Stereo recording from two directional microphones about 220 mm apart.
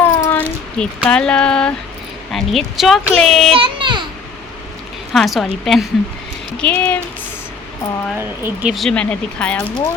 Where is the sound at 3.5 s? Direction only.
25° right (ahead or behind).